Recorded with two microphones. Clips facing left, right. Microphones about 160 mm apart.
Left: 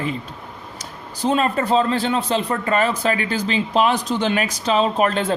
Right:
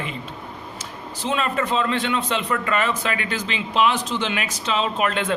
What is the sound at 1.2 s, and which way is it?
A man's voice, 40° left (ahead or behind).